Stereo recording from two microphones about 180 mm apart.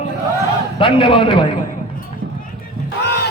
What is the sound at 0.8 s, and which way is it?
Speech, 30° left (ahead or behind).